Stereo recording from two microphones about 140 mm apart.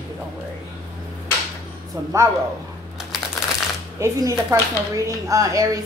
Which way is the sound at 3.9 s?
20° right (ahead or behind).